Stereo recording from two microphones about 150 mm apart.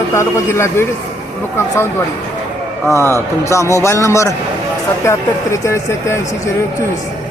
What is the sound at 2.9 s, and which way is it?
Speech, 20° right (ahead or behind).